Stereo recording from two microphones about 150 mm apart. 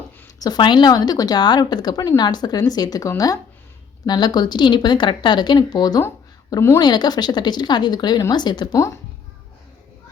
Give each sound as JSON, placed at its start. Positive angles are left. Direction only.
{"t": 0.3, "sound": "speech", "side_deg": 25}